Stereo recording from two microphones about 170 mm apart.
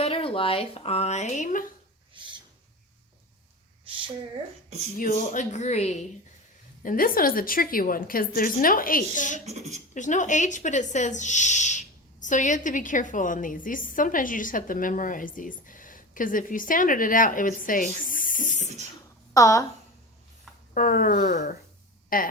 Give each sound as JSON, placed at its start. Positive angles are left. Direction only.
{"t": 0.0, "sound": "speech", "side_deg": 35}
{"t": 3.8, "sound": "speech", "side_deg": -30}
{"t": 4.9, "sound": "speech", "side_deg": 50}
{"t": 6.8, "sound": "a woman's voice", "side_deg": 55}
{"t": 9.5, "sound": "speech", "side_deg": -40}
{"t": 9.9, "sound": "speech", "side_deg": 45}
{"t": 18.4, "sound": "spray", "side_deg": 45}
{"t": 19.3, "sound": "speech", "side_deg": 20}
{"t": 20.7, "sound": "a woman's voice", "side_deg": 55}